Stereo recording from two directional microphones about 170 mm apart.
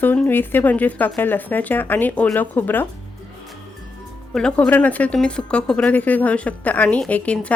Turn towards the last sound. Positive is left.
turn(degrees=10)  # may be behind; listen again after turning